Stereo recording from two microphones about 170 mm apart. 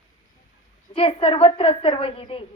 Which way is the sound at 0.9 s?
35° left (ahead or behind).